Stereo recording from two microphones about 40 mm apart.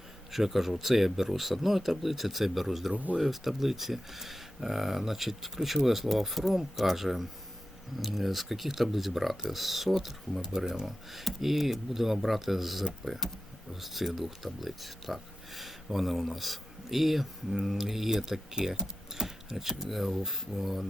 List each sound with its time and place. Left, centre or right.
0.3 s speech: centre
2.9 s speech: right
3.2 s speech: centre